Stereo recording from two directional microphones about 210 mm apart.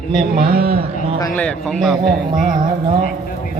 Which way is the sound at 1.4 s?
Centre (ahead or behind).